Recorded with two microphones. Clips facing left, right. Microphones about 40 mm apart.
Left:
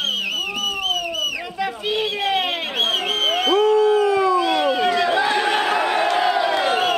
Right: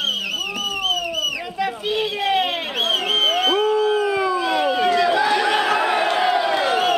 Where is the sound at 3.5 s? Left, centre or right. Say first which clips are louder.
Left 3 dB; centre.